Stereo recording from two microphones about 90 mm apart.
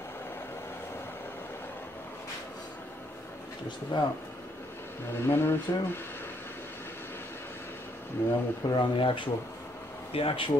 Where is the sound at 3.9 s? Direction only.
60° left (ahead or behind).